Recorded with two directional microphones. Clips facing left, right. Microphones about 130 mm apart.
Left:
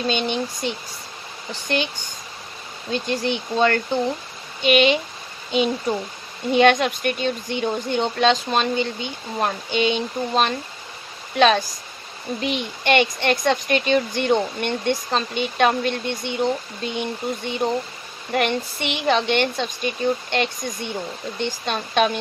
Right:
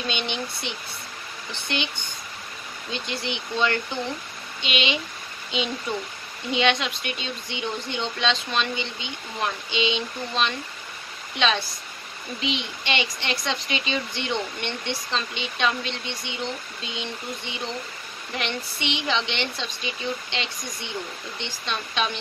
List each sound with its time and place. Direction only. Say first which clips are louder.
0.0 s speech: left 6 dB; 40° left (ahead or behind)
2.9 s speech: left 8 dB; 45° left (ahead or behind)